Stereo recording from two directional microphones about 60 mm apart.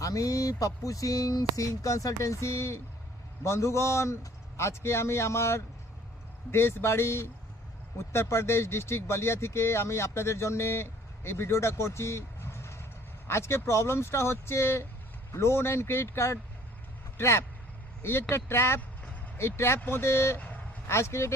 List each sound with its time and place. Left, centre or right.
0.0 s speech: left